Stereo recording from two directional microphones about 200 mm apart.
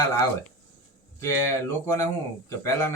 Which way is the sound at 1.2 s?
15° left (ahead or behind).